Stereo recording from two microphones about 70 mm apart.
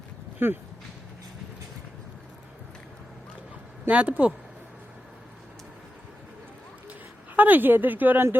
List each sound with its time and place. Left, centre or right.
0.3 s speech: right
3.8 s speech: centre
7.3 s speech: right